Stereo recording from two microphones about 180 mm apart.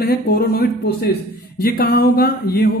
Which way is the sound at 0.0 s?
60° left (ahead or behind).